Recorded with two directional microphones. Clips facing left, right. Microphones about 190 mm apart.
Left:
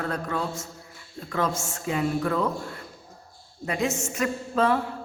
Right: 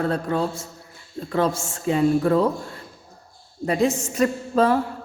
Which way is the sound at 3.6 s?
35° right (ahead or behind).